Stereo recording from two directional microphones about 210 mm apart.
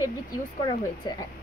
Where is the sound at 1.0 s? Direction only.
20° left (ahead or behind).